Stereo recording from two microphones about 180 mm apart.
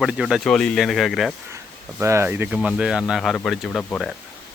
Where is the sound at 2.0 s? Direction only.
15° right (ahead or behind); by 4.1 s 5° left (ahead or behind).